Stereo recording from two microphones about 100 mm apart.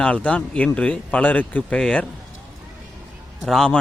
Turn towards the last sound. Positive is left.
turn(degrees=5)  # may be behind; listen again after turning